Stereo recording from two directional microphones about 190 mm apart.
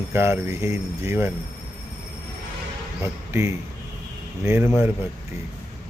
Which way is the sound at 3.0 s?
15° right (ahead or behind).